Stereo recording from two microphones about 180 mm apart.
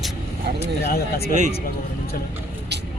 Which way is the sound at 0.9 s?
60° left (ahead or behind).